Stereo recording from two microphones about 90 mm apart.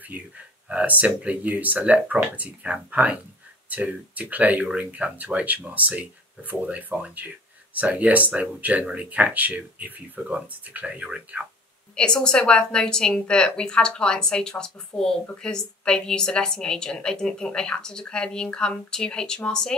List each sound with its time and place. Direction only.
0.7 s speech: 15° right (ahead or behind)
11.9 s a woman's voice: 10° left (ahead or behind)